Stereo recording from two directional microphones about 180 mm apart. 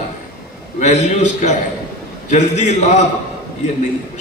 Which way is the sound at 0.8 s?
40° left (ahead or behind).